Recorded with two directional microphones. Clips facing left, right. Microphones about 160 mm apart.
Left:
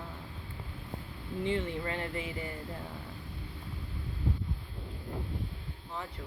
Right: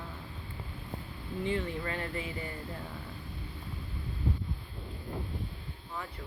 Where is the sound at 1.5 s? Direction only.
20° left (ahead or behind).